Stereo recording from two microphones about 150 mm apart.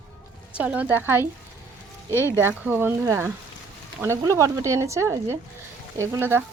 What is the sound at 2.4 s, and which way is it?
Speech, 15° right (ahead or behind).